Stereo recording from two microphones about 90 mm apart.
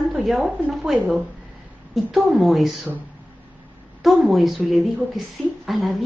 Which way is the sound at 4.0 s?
Centre (ahead or behind).